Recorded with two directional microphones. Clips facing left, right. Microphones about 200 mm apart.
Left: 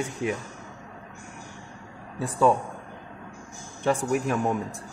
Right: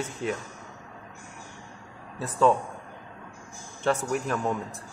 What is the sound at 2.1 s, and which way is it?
Speech, 10° left (ahead or behind).